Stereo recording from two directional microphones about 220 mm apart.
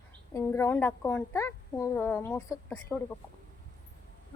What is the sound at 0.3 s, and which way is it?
A woman's voice, 10° left (ahead or behind).